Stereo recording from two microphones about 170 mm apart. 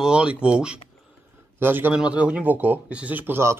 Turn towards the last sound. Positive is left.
turn(degrees=-15)  # may be behind; listen again after turning